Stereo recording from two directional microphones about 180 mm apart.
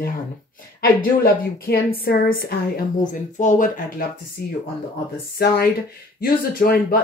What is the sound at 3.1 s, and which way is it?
Speech, 45° left (ahead or behind).